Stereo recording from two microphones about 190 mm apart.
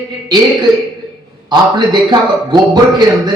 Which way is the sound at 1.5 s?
25° right (ahead or behind).